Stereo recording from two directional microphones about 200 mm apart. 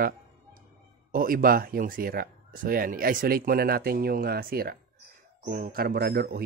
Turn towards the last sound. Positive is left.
turn(degrees=-50)  # may be behind; listen again after turning